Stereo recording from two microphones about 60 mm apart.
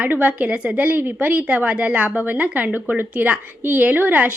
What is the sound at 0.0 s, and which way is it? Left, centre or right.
A woman's voice, right.